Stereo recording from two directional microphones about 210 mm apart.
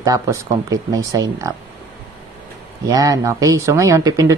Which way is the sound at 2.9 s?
15° right (ahead or behind).